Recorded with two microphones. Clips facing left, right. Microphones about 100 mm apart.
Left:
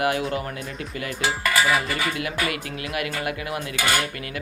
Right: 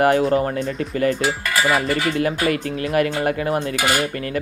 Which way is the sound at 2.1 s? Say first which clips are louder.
Right 7 dB; 40° right (ahead or behind).